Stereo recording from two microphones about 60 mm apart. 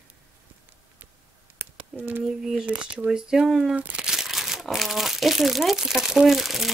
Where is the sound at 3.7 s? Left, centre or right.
Right.